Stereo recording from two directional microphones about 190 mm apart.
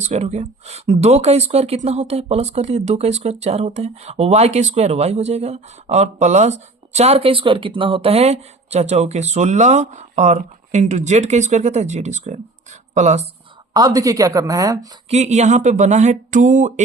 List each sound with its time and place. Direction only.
0.0 s speech: 35° right (ahead or behind)
13.7 s speech: 20° right (ahead or behind)
15.1 s speech: 35° right (ahead or behind)